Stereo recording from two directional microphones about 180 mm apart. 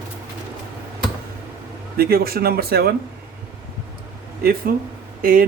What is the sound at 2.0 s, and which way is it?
Speech, 60° right (ahead or behind).